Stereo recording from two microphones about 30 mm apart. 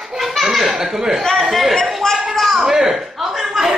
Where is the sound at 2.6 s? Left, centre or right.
Centre.